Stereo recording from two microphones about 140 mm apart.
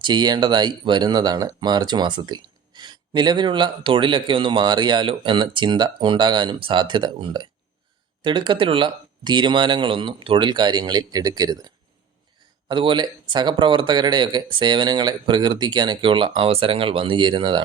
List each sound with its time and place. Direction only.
0.0 s speech: 30° right (ahead or behind)